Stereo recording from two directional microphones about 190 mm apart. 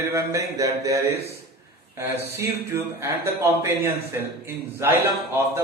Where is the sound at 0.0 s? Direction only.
15° right (ahead or behind).